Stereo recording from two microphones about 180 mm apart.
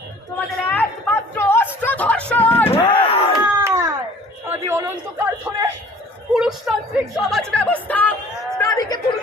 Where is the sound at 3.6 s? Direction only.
15° right (ahead or behind).